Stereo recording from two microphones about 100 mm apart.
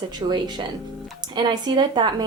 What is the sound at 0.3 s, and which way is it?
A woman's voice, 45° right (ahead or behind).